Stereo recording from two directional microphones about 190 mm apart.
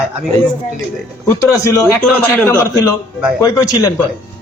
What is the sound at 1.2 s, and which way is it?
A man's voice, 15° left (ahead or behind).